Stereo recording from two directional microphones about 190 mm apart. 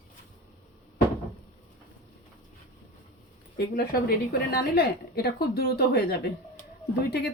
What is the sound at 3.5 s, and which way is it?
A woman's voice, 55° left (ahead or behind).